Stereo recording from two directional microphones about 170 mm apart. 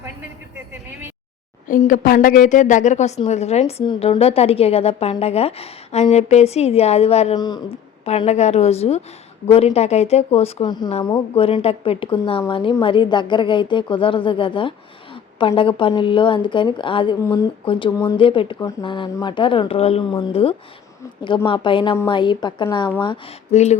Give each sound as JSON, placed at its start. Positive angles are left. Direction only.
{"t": 1.9, "sound": "a woman's voice", "side_deg": 55}
{"t": 7.3, "sound": "speech", "side_deg": 25}
{"t": 8.0, "sound": "a woman's voice", "side_deg": 40}
{"t": 10.7, "sound": "a woman's voice", "side_deg": 25}
{"t": 23.5, "sound": "a woman's voice", "side_deg": 40}